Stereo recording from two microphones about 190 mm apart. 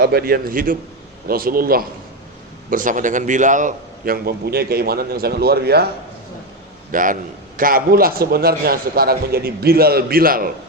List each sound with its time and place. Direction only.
0.0 s a man's voice: 55° right (ahead or behind)
6.9 s a man's voice: 45° right (ahead or behind)